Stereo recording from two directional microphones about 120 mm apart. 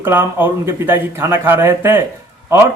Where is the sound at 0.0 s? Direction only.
15° right (ahead or behind).